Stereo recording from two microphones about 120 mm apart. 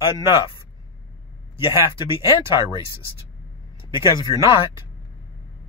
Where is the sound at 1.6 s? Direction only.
50° left (ahead or behind).